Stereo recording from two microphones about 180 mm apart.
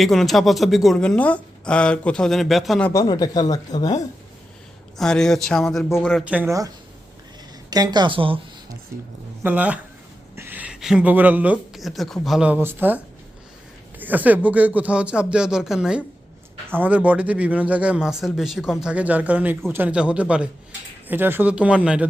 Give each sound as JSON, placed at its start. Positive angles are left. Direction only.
{"t": 0.0, "sound": "speech", "side_deg": 0}
{"t": 2.9, "sound": "speech", "side_deg": 20}
{"t": 4.9, "sound": "speech", "side_deg": 5}
{"t": 6.3, "sound": "a man's voice", "side_deg": -10}
{"t": 7.7, "sound": "a woman's voice", "side_deg": -20}
{"t": 9.4, "sound": "a man's voice", "side_deg": -10}
{"t": 14.0, "sound": "a man's voice", "side_deg": -10}